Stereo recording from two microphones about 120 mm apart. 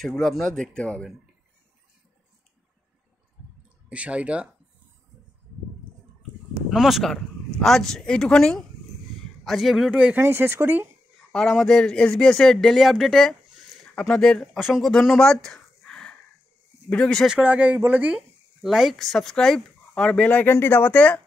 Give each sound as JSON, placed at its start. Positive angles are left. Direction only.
{"t": 0.0, "sound": "speech", "side_deg": 5}
{"t": 3.9, "sound": "speech", "side_deg": -10}
{"t": 6.7, "sound": "a man's voice", "side_deg": 0}
{"t": 9.8, "sound": "speech", "side_deg": -10}
{"t": 11.3, "sound": "speech", "side_deg": 5}
{"t": 17.3, "sound": "speech", "side_deg": -10}